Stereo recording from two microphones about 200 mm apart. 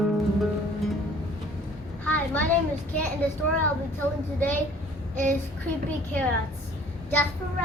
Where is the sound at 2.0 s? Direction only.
10° left (ahead or behind).